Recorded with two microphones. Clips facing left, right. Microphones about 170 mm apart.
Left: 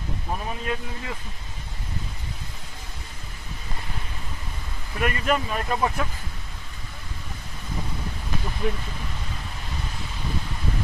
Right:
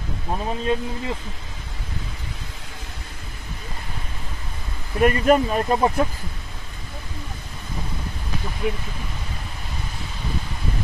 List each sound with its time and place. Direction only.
0.3 s speech: 25° right (ahead or behind)
5.0 s speech: 40° right (ahead or behind)